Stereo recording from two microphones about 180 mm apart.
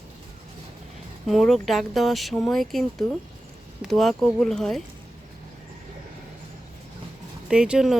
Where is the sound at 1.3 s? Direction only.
Centre (ahead or behind).